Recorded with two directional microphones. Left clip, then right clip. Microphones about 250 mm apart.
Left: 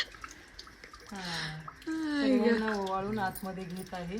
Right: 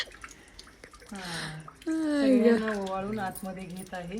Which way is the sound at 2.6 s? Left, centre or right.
Centre.